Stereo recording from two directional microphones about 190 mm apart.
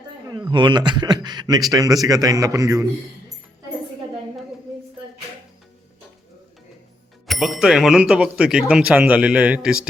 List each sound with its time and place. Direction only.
0.3 s speech: 20° right (ahead or behind)
7.3 s speech: centre (ahead or behind)